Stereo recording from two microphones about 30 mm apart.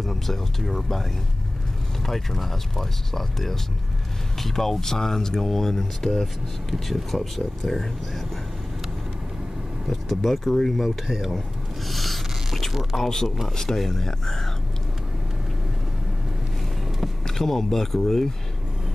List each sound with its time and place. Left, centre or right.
0.0 s speech: centre
2.0 s speech: centre
6.7 s speech: centre
9.8 s speech: centre
11.9 s a sound: centre
12.9 s speech: centre
17.3 s speech: centre